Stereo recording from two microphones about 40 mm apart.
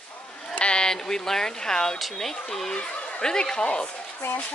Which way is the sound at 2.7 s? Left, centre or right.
Left.